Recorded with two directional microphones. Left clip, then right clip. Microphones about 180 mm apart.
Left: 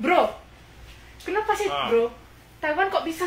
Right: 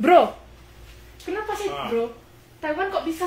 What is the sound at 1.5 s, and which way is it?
Speech, 10° left (ahead or behind).